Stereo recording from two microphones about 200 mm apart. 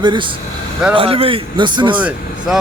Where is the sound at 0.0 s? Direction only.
25° right (ahead or behind).